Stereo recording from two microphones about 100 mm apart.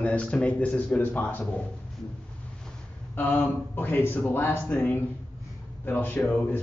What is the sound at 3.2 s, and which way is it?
Speech, 20° left (ahead or behind).